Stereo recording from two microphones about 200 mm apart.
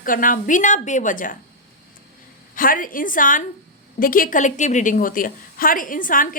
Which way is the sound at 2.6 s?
45° left (ahead or behind).